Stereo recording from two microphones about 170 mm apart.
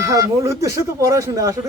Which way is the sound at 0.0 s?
20° right (ahead or behind).